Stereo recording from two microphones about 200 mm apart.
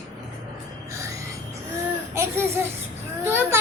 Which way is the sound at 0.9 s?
15° right (ahead or behind).